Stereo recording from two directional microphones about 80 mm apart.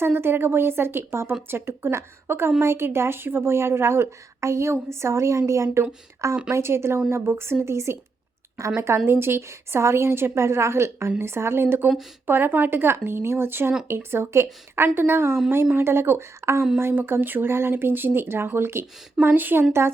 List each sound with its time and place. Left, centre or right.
0.0 s a woman's voice: right
9.0 s a woman's voice: right